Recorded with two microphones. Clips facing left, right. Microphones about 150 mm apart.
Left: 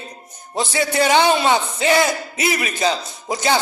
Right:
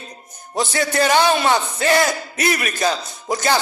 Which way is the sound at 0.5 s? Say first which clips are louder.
Even; 20° left (ahead or behind).